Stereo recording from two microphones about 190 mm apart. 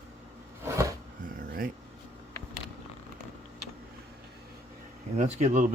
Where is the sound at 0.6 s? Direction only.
15° right (ahead or behind).